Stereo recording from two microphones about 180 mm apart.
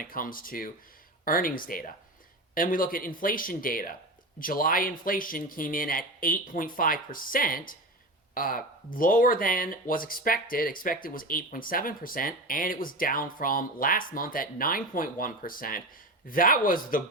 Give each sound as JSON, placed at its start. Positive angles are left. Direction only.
{"t": 0.0, "sound": "speech", "side_deg": 50}